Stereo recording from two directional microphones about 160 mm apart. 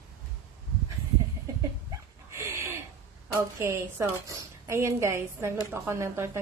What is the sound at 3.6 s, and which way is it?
A woman's voice, 20° right (ahead or behind).